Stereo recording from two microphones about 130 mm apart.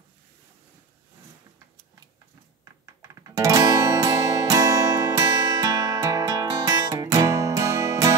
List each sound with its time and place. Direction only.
3.0 s guitar: 25° right (ahead or behind)